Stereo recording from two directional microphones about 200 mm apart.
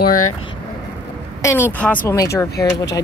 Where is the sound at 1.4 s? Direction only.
15° left (ahead or behind).